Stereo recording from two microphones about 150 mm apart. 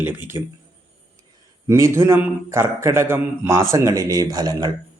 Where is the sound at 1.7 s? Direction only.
20° right (ahead or behind).